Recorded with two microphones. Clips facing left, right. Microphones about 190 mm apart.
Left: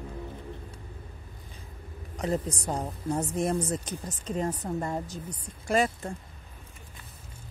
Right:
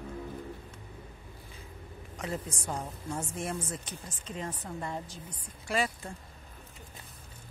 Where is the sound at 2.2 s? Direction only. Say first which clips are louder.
Left 7 dB; 35° left (ahead or behind).